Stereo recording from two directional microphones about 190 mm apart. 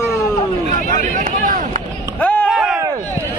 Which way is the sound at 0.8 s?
45° right (ahead or behind).